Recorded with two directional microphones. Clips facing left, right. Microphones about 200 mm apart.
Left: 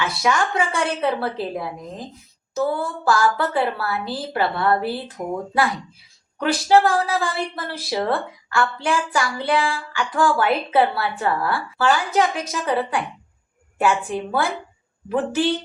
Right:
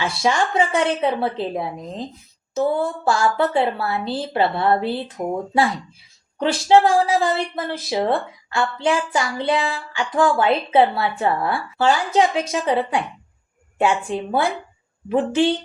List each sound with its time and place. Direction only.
0.0 s a woman's voice: 25° right (ahead or behind)
6.4 s a woman's voice: 25° right (ahead or behind)